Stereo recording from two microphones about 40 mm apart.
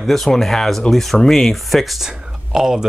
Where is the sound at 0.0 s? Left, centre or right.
Centre.